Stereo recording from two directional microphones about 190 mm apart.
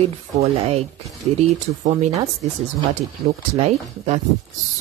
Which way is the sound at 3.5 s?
35° right (ahead or behind).